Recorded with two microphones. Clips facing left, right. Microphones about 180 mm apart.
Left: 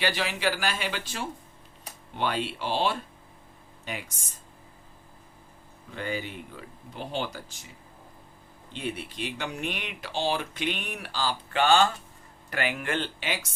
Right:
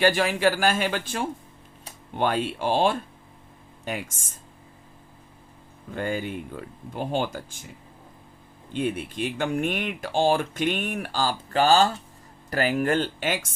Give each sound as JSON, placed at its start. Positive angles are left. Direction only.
{"t": 0.0, "sound": "speech", "side_deg": -50}
{"t": 5.9, "sound": "speech", "side_deg": -45}
{"t": 8.7, "sound": "speech", "side_deg": -50}